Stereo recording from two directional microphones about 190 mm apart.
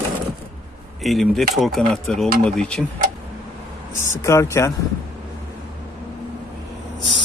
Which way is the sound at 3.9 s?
15° left (ahead or behind).